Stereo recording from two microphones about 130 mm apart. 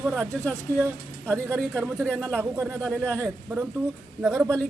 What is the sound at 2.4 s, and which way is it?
Speech, 15° right (ahead or behind).